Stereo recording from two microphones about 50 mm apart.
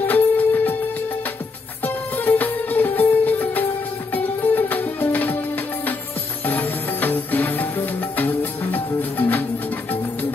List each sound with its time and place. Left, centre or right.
0.0 s music: left
1.8 s music: left
6.4 s music: left